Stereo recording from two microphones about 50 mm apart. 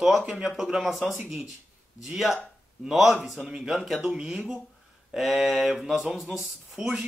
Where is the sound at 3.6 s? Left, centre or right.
Centre.